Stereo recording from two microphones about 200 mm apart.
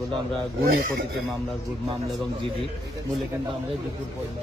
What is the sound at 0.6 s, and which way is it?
Speech, 50° right (ahead or behind).